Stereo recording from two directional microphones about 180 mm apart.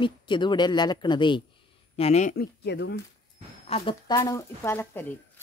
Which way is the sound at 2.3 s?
70° left (ahead or behind).